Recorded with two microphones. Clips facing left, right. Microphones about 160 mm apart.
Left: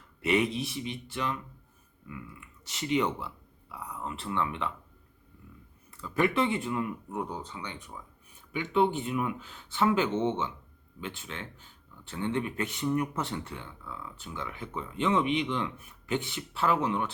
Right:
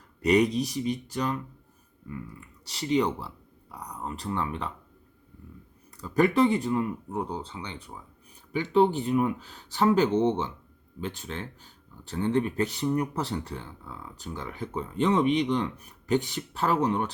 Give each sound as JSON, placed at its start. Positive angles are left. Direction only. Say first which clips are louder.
{"t": 0.2, "sound": "speech", "louder": "right 5 dB", "side_deg": -40}
{"t": 6.0, "sound": "speech", "louder": "right 5 dB", "side_deg": -40}